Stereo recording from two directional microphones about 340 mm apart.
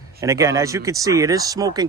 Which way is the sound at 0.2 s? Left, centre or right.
Centre.